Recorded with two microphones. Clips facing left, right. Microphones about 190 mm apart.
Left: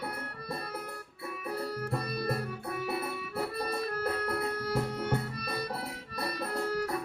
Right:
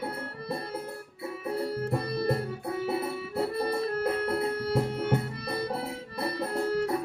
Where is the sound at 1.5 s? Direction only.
25° right (ahead or behind).